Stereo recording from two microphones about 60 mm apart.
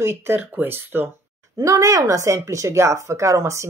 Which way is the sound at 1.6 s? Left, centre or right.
Right.